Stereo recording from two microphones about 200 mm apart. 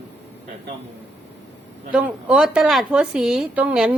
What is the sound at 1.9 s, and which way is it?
Speech, 5° right (ahead or behind).